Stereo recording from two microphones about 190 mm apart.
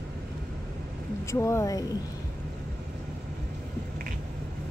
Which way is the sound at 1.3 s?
15° left (ahead or behind).